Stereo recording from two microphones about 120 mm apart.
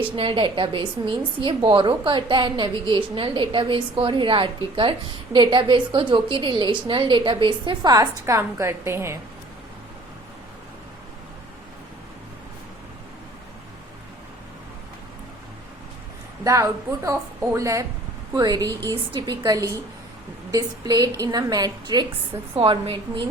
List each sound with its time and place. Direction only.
0.2 s a woman's voice: 45° right (ahead or behind); by 9.1 s 20° right (ahead or behind)
16.4 s a woman's voice: 25° right (ahead or behind)
18.6 s a woman's voice: 20° left (ahead or behind)
18.9 s a woman's voice: 35° right (ahead or behind)
22.5 s a woman's voice: 45° right (ahead or behind)